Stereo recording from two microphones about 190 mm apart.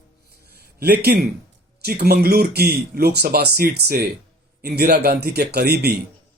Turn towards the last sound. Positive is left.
turn(degrees=-55)  # may be behind; listen again after turning